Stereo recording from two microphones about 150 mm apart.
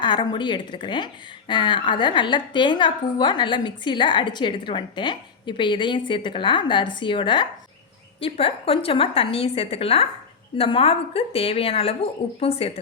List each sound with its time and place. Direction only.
0.0 s a woman's voice: 30° left (ahead or behind)